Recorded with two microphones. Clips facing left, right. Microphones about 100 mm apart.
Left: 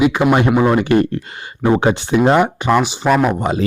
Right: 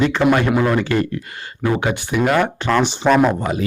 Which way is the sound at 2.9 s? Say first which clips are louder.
Even; 5° left (ahead or behind).